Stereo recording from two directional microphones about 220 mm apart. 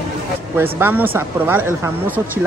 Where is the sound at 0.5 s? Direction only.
10° right (ahead or behind).